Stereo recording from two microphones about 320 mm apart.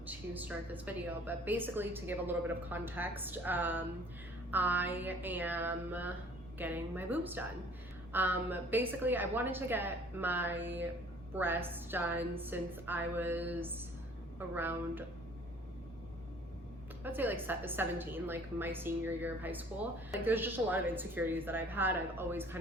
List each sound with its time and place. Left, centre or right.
0.0 s a woman's voice: centre
17.0 s a woman's voice: centre